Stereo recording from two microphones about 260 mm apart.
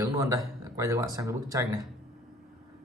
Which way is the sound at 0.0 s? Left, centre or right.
Centre.